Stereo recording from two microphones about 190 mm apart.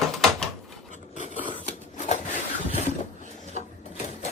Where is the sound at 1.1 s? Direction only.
40° left (ahead or behind).